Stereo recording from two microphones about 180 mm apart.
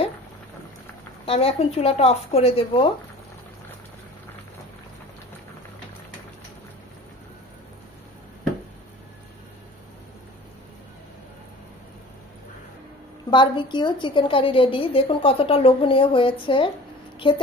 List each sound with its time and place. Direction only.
1.2 s speech: 35° left (ahead or behind)
13.3 s a woman's voice: 25° left (ahead or behind)